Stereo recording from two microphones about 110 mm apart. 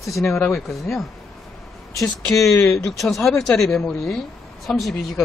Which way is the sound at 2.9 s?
Centre (ahead or behind).